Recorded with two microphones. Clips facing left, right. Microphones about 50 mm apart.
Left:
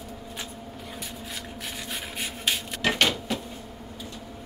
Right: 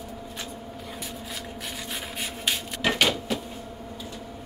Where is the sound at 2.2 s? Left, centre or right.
Centre.